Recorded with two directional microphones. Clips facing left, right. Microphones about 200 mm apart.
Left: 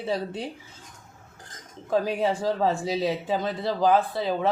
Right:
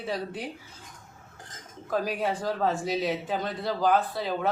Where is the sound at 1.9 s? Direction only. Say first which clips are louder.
Left 4 dB; 25° left (ahead or behind).